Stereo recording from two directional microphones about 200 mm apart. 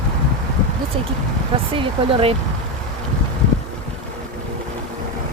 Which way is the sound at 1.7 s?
25° right (ahead or behind).